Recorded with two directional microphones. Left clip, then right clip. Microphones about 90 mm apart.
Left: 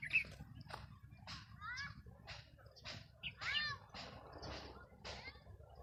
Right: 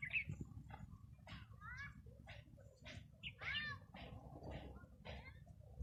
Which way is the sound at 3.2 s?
20° left (ahead or behind).